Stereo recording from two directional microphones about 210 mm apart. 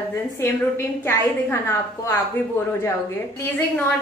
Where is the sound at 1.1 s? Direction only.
10° left (ahead or behind).